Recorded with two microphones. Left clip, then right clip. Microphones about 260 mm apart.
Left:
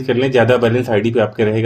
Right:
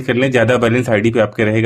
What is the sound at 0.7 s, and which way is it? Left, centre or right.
Speech, right.